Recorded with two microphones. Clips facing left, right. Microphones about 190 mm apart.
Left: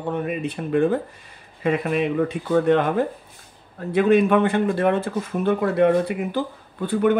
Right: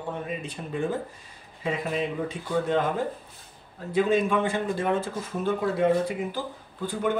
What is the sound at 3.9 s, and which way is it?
Speech, 60° left (ahead or behind).